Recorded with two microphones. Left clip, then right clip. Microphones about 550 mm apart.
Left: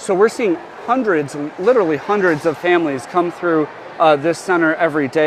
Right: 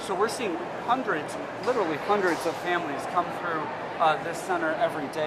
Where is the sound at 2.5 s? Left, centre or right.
Left.